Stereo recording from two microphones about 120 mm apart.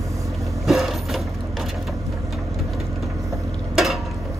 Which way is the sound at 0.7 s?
Centre (ahead or behind).